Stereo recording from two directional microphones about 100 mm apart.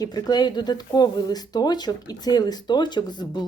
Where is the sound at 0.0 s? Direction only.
45° left (ahead or behind).